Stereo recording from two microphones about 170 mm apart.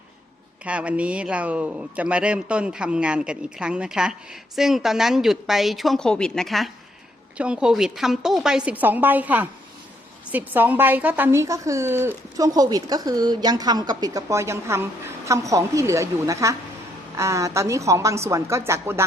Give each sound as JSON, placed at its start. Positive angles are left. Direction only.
{"t": 0.6, "sound": "a man's voice", "side_deg": -5}